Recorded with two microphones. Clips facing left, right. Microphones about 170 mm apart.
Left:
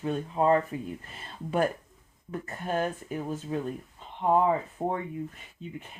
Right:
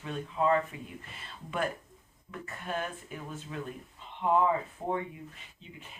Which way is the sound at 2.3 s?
40° left (ahead or behind).